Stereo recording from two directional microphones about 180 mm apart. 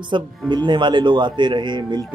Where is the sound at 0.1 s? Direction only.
25° right (ahead or behind).